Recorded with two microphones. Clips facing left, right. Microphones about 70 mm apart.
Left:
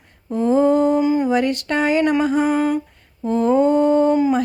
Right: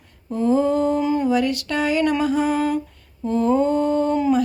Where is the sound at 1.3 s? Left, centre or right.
Left.